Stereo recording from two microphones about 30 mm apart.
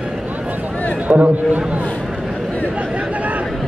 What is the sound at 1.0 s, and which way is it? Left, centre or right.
Speech, right.